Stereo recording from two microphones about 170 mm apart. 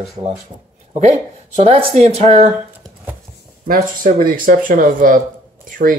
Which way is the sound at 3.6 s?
55° right (ahead or behind).